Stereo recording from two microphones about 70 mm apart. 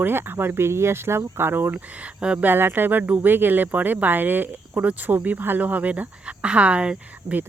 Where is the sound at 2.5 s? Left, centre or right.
Right.